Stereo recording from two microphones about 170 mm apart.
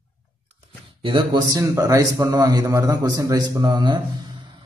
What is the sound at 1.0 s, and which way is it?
Speech, 25° right (ahead or behind).